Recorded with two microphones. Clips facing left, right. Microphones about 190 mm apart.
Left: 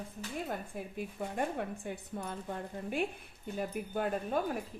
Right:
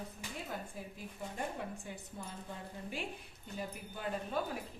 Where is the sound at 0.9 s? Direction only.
60° left (ahead or behind).